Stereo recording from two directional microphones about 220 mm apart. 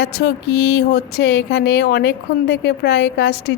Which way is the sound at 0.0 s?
50° left (ahead or behind).